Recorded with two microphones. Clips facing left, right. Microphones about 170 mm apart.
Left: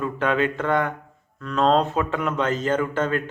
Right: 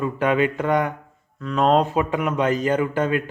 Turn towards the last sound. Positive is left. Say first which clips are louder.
# right 2 dB
turn(degrees=-15)  # may be behind; listen again after turning